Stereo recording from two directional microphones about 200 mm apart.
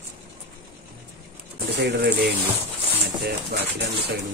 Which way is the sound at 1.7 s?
55° right (ahead or behind).